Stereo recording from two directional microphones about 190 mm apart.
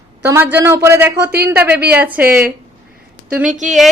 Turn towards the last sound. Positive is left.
turn(degrees=-5)  # may be behind; listen again after turning